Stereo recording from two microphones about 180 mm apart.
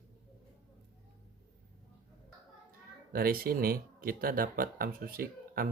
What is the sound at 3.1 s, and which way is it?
Speech, 55° right (ahead or behind).